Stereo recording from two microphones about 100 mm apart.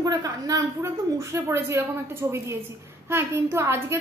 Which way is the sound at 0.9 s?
25° right (ahead or behind).